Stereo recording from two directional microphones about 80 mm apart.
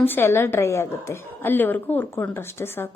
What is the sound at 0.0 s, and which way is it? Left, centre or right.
A woman's voice, left.